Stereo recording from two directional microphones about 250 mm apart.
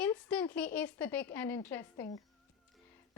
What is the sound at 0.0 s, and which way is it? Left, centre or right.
Speech, centre.